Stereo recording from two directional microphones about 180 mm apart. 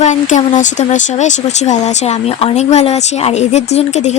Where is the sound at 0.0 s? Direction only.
40° left (ahead or behind).